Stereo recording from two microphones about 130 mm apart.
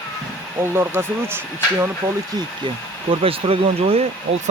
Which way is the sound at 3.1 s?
45° right (ahead or behind).